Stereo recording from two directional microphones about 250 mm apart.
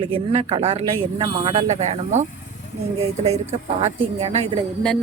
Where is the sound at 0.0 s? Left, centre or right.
Right.